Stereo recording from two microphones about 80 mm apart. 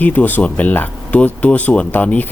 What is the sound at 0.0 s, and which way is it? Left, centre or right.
Speech, left.